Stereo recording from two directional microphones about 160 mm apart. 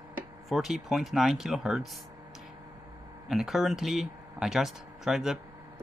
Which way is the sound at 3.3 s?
Centre (ahead or behind).